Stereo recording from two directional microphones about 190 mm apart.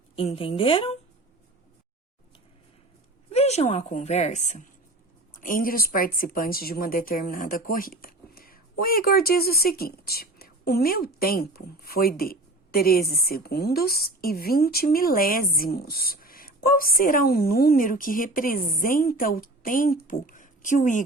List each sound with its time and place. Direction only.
0.2 s speech: 30° left (ahead or behind)
3.3 s a woman's voice: 35° left (ahead or behind)